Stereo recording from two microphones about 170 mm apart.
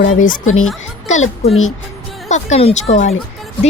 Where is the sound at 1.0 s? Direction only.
45° left (ahead or behind).